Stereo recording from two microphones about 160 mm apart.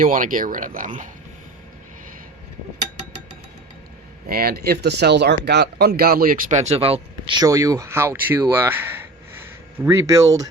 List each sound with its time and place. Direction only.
0.0 s speech: 55° right (ahead or behind)
4.3 s speech: 70° right (ahead or behind)
6.5 s speech: 45° right (ahead or behind); by 10.5 s 20° right (ahead or behind)